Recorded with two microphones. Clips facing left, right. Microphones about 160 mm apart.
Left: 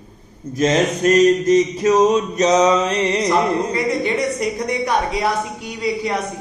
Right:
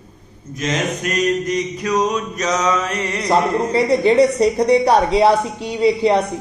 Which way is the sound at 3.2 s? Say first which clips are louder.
Right 1 dB; 30° right (ahead or behind).